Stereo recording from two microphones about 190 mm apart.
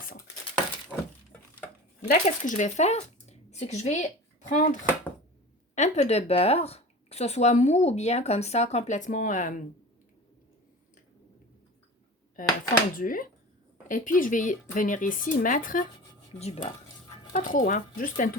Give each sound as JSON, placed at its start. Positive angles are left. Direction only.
{"t": 0.9, "sound": "breaking", "side_deg": -5}
{"t": 2.0, "sound": "speech", "side_deg": 45}
{"t": 12.4, "sound": "speech", "side_deg": 45}
{"t": 17.3, "sound": "speech", "side_deg": 45}